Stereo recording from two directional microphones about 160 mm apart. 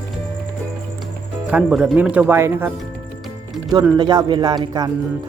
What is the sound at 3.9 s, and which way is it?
Speech, 25° right (ahead or behind).